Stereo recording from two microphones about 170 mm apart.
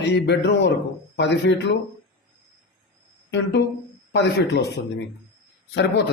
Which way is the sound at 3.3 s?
90° left.